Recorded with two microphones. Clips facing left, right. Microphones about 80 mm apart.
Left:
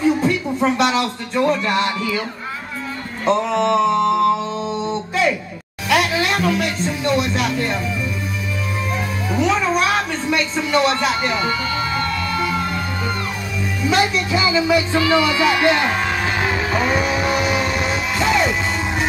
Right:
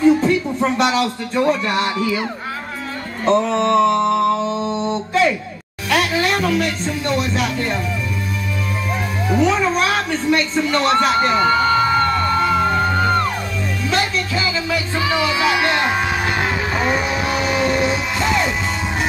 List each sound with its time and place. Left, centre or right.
0.2 s speech: centre
3.3 s mantra: centre
5.9 s speech: centre
9.3 s speech: centre
11.3 s music: right
13.8 s music: centre
15.0 s speech: centre
15.7 s music: centre